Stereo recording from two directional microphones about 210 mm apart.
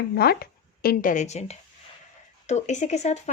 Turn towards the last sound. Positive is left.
turn(degrees=35)  # may be behind; listen again after turning